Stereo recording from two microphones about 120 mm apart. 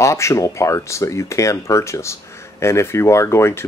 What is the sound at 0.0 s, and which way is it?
Speech, 25° left (ahead or behind).